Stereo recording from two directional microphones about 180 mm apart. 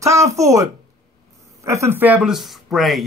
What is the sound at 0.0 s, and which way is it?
Speech, 15° right (ahead or behind).